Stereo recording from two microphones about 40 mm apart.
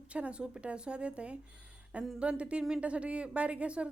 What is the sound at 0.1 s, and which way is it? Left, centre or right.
Speech, right.